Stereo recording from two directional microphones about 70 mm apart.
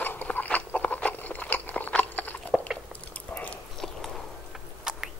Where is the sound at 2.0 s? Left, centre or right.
Left.